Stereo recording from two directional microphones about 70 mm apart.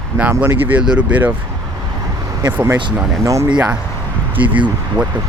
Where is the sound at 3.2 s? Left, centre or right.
Right.